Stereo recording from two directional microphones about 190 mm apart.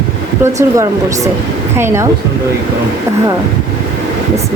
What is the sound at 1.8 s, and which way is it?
Speech, 15° right (ahead or behind).